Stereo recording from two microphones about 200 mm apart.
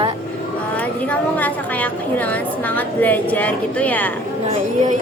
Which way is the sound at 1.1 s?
10° left (ahead or behind).